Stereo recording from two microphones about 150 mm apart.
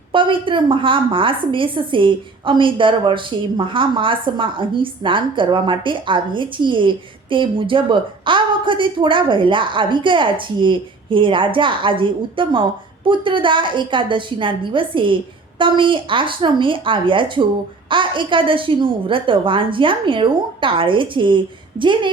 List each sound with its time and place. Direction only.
0.1 s a woman's voice: 35° right (ahead or behind)